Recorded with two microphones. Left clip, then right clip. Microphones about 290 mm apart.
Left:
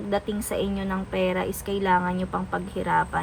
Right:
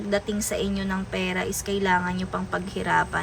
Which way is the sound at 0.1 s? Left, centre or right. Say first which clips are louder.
Right 1 dB; centre.